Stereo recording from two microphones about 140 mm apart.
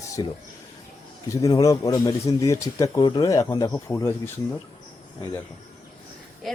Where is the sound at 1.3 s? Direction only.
25° left (ahead or behind).